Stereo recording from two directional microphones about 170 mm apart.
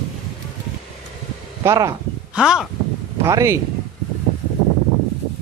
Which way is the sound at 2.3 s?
5° right (ahead or behind).